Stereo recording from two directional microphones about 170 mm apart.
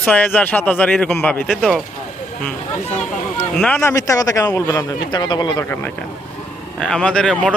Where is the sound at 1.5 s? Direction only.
Centre (ahead or behind).